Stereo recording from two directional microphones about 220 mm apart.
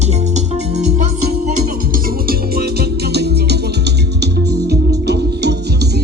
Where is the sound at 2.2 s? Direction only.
45° right (ahead or behind).